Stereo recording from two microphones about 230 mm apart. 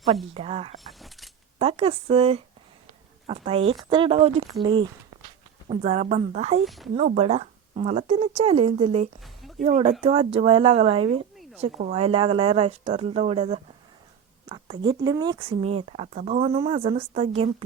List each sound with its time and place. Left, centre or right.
0.3 s speech: right
0.9 s a sound: centre
1.5 s speech: right
6.7 s speech: centre
6.9 s speech: right